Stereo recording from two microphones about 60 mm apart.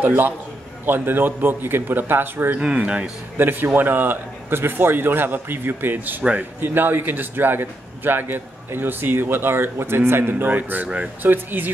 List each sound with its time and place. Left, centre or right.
0.0 s a man's voice: right
2.6 s speech: centre
3.3 s a man's voice: right